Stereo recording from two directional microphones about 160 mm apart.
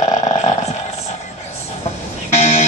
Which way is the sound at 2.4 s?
45° left (ahead or behind).